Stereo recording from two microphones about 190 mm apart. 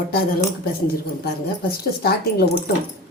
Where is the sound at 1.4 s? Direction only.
55° left (ahead or behind).